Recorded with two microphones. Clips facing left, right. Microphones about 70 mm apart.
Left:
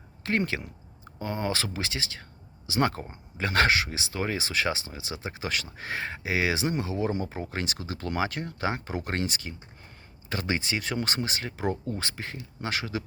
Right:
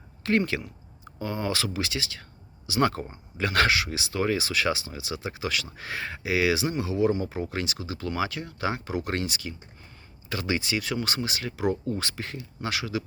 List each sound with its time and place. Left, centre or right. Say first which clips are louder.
0.2 s speech: right 3 dB; left